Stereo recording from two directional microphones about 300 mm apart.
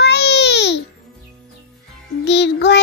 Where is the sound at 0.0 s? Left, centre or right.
Left.